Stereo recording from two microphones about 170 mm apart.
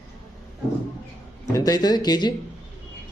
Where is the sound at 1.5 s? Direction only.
20° left (ahead or behind).